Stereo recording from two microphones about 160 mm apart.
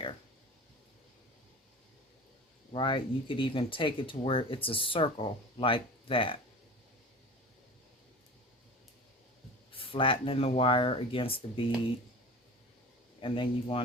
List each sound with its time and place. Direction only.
2.7 s speech: 30° left (ahead or behind)
9.7 s speech: 35° left (ahead or behind)
13.2 s speech: 35° left (ahead or behind)